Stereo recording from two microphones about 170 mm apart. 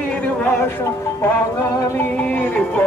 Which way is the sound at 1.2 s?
20° left (ahead or behind).